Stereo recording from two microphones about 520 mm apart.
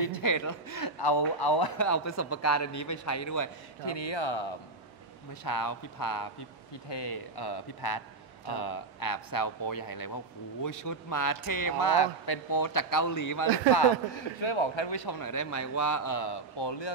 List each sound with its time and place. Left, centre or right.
0.0 s speech: left
3.8 s speech: left
5.4 s speech: left
14.1 s speech: left